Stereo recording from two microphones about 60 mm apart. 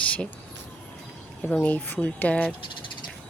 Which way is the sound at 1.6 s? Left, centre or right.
Left.